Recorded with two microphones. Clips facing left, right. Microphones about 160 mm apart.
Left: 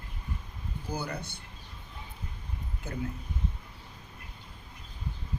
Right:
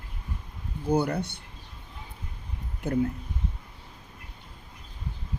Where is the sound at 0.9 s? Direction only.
60° right (ahead or behind).